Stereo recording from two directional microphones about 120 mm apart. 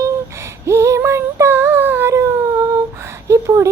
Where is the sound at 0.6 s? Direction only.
25° right (ahead or behind).